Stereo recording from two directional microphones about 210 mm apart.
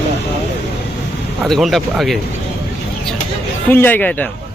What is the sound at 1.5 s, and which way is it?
Speech, centre (ahead or behind).